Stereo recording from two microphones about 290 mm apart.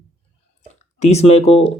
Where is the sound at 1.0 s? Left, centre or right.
Left.